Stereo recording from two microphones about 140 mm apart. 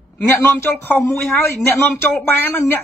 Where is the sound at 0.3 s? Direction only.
15° left (ahead or behind).